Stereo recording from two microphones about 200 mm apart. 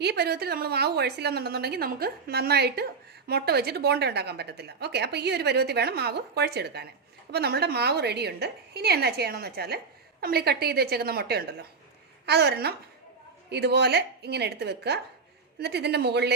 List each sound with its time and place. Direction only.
0.0 s a woman's voice: 55° right (ahead or behind)